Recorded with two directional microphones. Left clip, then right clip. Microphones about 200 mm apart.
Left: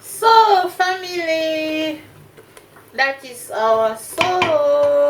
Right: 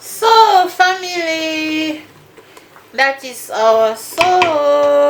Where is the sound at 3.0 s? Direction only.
55° right (ahead or behind).